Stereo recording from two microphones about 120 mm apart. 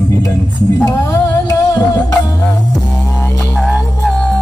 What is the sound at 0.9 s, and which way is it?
Music, 25° left (ahead or behind).